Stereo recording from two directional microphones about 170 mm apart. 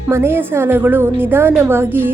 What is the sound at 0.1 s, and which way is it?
Speech, 15° right (ahead or behind).